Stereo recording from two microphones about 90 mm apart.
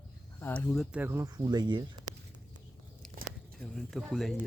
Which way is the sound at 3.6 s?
5° left (ahead or behind).